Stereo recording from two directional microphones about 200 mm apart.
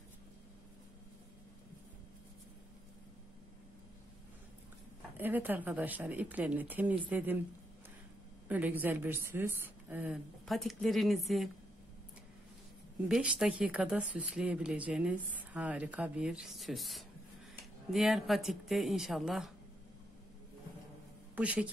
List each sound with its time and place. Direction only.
5.1 s speech: 10° right (ahead or behind)
8.5 s speech: 10° right (ahead or behind)
13.1 s speech: 5° right (ahead or behind)
21.4 s speech: 5° right (ahead or behind)